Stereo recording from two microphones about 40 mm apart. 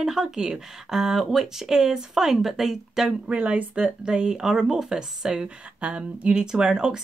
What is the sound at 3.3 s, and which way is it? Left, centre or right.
Speech, right.